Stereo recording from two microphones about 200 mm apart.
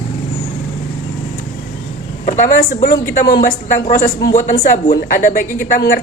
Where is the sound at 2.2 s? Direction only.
40° left (ahead or behind).